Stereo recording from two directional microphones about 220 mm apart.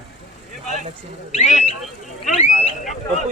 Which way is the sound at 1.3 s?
30° left (ahead or behind).